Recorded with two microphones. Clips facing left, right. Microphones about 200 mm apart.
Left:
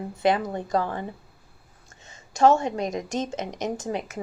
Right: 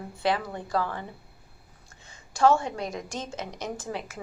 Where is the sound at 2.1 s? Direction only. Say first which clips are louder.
Left 3 dB; 20° left (ahead or behind).